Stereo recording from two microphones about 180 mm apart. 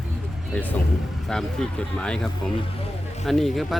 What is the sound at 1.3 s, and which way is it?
Speech, 5° left (ahead or behind).